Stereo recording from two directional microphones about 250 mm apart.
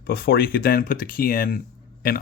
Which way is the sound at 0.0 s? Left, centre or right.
Left.